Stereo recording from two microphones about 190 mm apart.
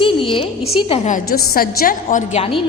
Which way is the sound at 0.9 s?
40° left (ahead or behind).